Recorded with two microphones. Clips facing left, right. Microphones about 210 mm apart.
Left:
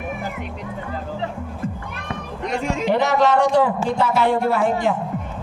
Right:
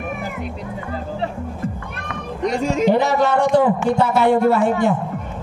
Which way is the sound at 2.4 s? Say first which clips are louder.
Right 5 dB; 40° right (ahead or behind).